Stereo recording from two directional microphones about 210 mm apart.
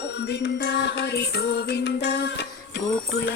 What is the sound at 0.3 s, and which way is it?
Music, 55° left (ahead or behind).